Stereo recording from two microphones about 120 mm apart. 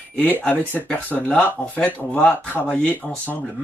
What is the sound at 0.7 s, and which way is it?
Speech, 15° left (ahead or behind).